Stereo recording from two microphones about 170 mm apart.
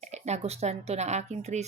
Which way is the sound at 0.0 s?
40° right (ahead or behind).